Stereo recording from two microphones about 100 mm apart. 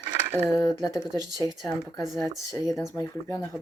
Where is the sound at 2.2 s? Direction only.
35° left (ahead or behind).